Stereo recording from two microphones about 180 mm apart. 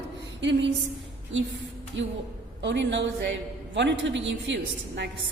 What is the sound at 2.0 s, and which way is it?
Speech, 90° right.